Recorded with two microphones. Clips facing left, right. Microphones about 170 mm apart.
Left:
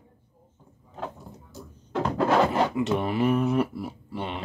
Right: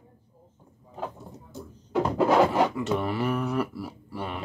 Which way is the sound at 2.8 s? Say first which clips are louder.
Left 2 dB; 20° left (ahead or behind).